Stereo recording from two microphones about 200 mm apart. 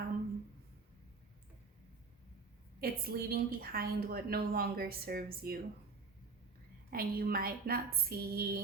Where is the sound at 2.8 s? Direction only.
50° right (ahead or behind).